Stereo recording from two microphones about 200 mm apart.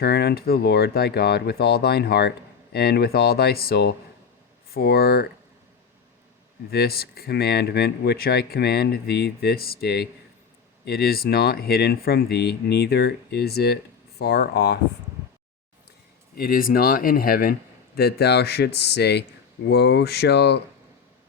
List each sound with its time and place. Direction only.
0.0 s speech: 50° left (ahead or behind)
6.7 s speech: 50° left (ahead or behind)
16.4 s speech: 45° left (ahead or behind)